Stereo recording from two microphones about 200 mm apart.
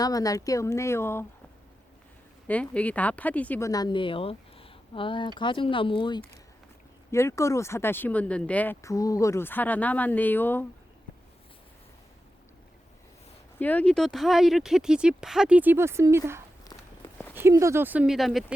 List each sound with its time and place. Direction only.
0.0 s speech: 15° left (ahead or behind)
2.5 s speech: 5° left (ahead or behind)
13.6 s speech: 10° left (ahead or behind); by 16.4 s 15° right (ahead or behind)
16.6 s walk: 15° left (ahead or behind)
17.3 s speech: 15° right (ahead or behind)